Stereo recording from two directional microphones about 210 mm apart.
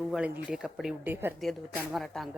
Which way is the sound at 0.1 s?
5° right (ahead or behind).